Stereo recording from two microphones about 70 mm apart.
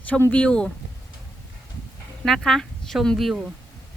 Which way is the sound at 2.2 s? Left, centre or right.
Centre.